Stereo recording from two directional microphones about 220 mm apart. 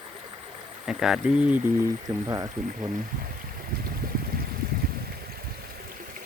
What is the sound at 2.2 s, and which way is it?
Speech, 15° right (ahead or behind).